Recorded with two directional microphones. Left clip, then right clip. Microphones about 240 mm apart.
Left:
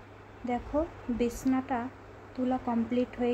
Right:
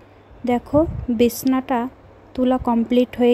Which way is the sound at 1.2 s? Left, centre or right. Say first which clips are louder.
Right 12 dB; right.